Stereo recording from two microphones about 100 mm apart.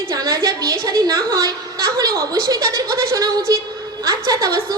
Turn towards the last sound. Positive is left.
turn(degrees=-35)  # may be behind; listen again after turning